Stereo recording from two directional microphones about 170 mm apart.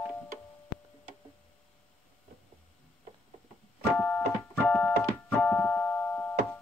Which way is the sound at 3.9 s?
5° left (ahead or behind).